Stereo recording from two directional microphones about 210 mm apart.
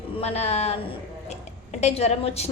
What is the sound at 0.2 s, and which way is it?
A woman's voice, 30° left (ahead or behind).